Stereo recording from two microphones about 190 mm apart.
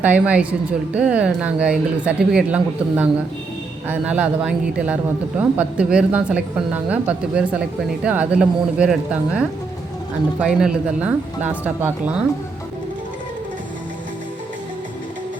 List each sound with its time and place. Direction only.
0.0 s a woman's voice: 5° right (ahead or behind)